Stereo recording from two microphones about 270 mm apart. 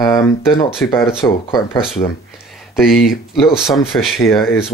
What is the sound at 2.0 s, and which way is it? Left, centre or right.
Speech, centre.